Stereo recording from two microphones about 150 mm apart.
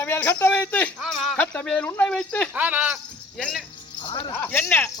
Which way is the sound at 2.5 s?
10° right (ahead or behind).